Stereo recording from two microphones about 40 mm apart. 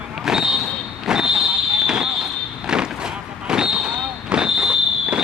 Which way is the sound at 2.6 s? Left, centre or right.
Centre.